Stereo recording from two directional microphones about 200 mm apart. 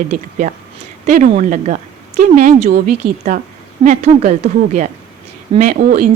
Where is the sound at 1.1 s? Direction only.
40° right (ahead or behind).